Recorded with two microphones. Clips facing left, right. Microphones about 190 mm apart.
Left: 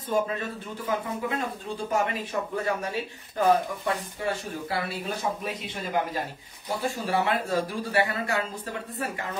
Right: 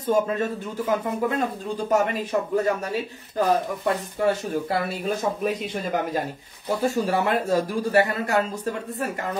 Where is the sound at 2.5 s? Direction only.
40° right (ahead or behind).